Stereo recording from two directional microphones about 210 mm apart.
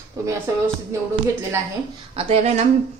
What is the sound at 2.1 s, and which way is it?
Speech, 25° right (ahead or behind).